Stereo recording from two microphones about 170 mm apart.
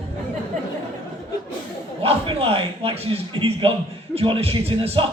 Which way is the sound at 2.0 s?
35° right (ahead or behind).